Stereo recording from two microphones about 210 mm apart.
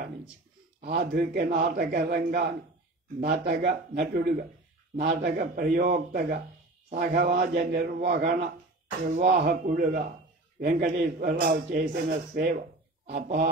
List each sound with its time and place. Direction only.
0.8 s a man's voice: 45° right (ahead or behind)